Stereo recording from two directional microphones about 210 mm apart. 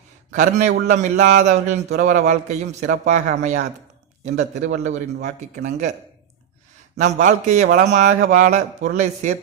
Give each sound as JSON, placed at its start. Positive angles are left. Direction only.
{"t": 0.3, "sound": "a man's voice", "side_deg": -35}
{"t": 6.9, "sound": "a man's voice", "side_deg": -35}